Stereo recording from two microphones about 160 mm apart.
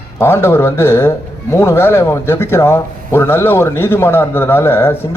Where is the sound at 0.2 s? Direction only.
15° left (ahead or behind).